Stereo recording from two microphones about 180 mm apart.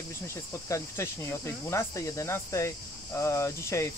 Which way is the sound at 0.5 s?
15° left (ahead or behind).